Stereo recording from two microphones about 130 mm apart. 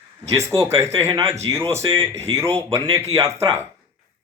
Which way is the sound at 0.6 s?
20° right (ahead or behind).